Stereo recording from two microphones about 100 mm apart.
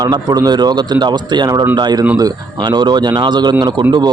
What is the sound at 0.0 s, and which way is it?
Speech, 45° right (ahead or behind).